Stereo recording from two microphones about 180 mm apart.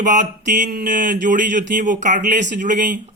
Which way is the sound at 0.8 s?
50° right (ahead or behind).